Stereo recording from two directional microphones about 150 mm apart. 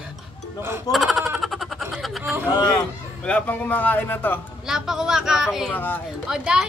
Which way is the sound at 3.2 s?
5° left (ahead or behind).